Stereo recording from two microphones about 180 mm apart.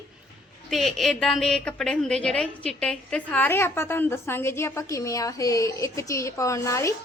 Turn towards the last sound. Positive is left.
turn(degrees=15)  # may be behind; listen again after turning